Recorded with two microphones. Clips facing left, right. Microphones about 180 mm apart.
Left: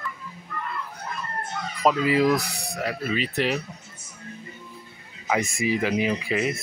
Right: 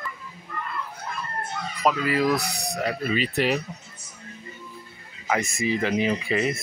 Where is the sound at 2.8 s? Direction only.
5° left (ahead or behind).